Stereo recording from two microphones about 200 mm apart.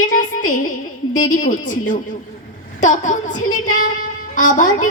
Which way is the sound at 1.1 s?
40° left (ahead or behind).